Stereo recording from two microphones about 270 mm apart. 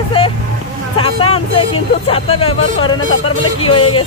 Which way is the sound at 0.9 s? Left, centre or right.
Centre.